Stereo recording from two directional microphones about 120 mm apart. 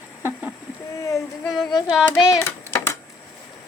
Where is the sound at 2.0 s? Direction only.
20° left (ahead or behind).